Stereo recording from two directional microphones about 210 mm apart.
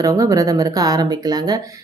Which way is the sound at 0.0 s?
15° right (ahead or behind).